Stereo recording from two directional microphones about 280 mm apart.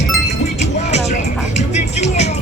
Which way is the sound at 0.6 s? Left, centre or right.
Left.